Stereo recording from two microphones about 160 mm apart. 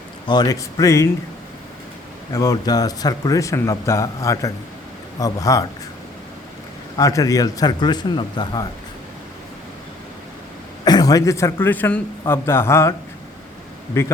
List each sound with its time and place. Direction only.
0.3 s speech: 25° left (ahead or behind)
2.3 s speech: 20° left (ahead or behind)
6.9 s speech: 20° left (ahead or behind)
10.8 s a man's voice: 25° left (ahead or behind)
14.0 s a man's voice: 15° left (ahead or behind)